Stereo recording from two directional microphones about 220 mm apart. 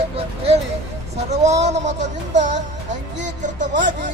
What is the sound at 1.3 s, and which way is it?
Music, 30° right (ahead or behind).